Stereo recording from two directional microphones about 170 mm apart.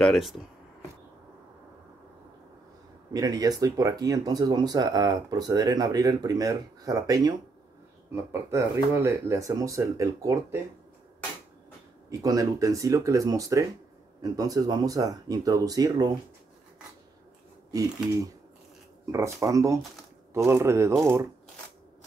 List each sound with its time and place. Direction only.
0.0 s speech: centre (ahead or behind)
3.1 s speech: 20° right (ahead or behind)
12.1 s speech: 20° right (ahead or behind)
17.6 s speech: 20° right (ahead or behind)